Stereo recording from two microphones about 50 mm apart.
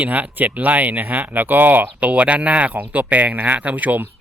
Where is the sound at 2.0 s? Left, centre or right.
Right.